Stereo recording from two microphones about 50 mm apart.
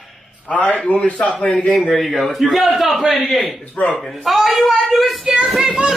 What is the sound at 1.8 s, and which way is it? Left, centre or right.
Speech, centre.